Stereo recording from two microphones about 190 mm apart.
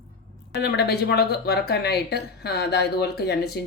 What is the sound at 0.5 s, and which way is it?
Speech, 60° left (ahead or behind).